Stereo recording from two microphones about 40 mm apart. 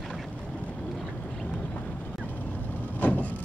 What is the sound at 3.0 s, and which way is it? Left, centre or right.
Vehicle, left.